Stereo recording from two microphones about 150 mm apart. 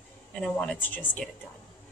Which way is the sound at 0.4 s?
5° left (ahead or behind).